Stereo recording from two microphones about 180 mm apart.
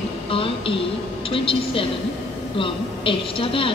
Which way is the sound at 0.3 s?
30° left (ahead or behind).